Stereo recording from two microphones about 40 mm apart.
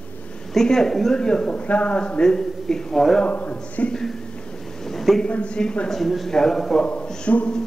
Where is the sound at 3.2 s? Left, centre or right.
Left.